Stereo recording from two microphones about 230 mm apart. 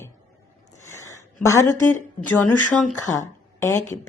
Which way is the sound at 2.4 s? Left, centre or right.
Left.